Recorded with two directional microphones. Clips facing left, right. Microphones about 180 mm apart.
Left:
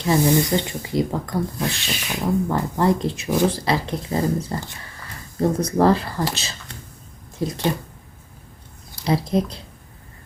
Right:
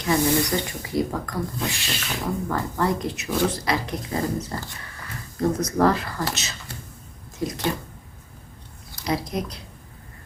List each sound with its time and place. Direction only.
0.0 s speech: 25° left (ahead or behind)
9.0 s speech: 30° left (ahead or behind)